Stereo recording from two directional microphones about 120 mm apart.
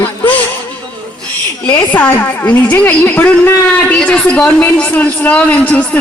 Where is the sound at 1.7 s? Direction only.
10° left (ahead or behind).